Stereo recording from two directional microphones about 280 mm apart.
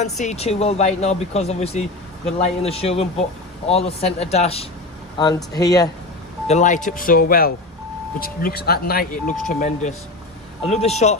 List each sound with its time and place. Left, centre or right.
0.0 s speech: left
6.4 s speech: left